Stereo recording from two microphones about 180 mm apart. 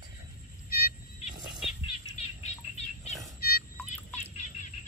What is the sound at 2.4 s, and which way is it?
Bird, 35° left (ahead or behind).